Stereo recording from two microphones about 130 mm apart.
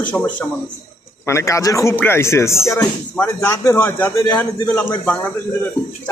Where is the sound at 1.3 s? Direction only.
25° left (ahead or behind).